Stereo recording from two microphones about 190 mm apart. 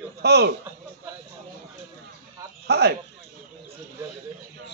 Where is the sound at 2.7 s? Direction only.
60° right (ahead or behind).